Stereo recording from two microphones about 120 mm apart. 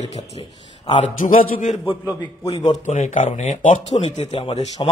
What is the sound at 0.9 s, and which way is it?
Speech, 90° left.